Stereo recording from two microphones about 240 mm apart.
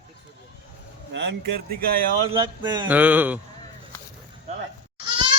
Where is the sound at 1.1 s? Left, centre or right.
Right.